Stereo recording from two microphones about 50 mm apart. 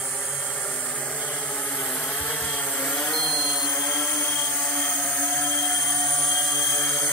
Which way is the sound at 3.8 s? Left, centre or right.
Left.